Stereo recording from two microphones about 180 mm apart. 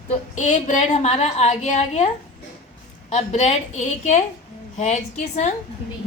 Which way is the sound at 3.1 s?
35° left (ahead or behind).